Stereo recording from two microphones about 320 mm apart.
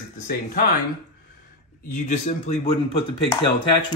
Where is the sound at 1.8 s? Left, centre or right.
Left.